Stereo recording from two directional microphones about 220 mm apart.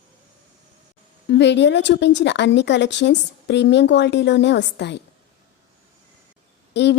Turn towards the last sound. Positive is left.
turn(degrees=50)  # may be behind; listen again after turning